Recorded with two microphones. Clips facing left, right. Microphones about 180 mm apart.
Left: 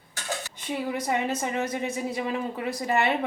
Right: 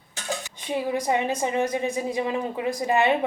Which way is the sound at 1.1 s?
15° right (ahead or behind).